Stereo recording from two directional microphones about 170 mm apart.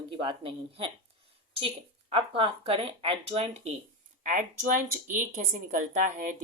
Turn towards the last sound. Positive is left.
turn(degrees=-50)  # may be behind; listen again after turning